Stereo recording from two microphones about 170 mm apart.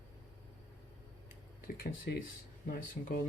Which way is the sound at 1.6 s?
60° left (ahead or behind).